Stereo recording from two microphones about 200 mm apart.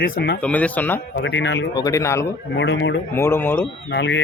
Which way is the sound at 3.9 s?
60° left (ahead or behind).